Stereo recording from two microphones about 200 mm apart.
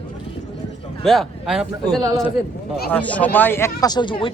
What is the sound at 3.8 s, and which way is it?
Speech, 20° left (ahead or behind).